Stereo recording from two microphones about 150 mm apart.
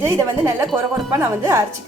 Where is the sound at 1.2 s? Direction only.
15° right (ahead or behind).